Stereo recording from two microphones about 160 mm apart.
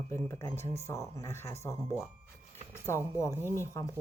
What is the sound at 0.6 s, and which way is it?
Speech, 40° right (ahead or behind).